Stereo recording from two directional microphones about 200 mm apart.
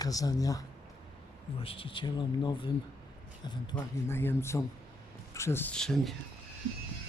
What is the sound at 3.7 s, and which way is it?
Speech, 10° left (ahead or behind).